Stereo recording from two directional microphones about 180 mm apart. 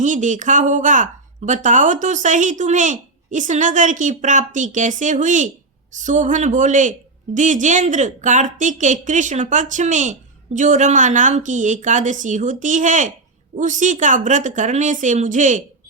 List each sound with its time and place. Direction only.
0.0 s a woman's voice: 45° right (ahead or behind)